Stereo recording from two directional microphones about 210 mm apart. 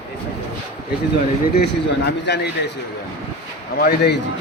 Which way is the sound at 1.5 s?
55° left (ahead or behind).